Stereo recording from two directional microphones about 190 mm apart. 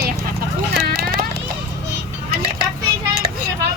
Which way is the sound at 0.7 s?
55° right (ahead or behind).